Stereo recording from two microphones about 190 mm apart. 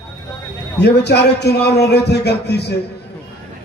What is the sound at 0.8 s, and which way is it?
A man's voice, 60° left (ahead or behind).